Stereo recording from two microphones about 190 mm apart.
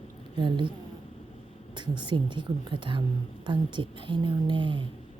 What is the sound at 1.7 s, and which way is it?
A woman's voice, 25° right (ahead or behind).